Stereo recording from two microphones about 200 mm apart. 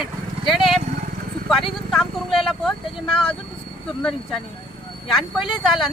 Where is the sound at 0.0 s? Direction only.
Centre (ahead or behind).